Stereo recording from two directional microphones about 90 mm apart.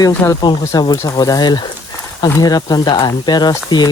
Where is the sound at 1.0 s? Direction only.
45° left (ahead or behind).